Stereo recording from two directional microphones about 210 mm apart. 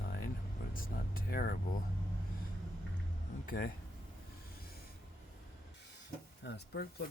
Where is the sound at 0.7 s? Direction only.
45° left (ahead or behind).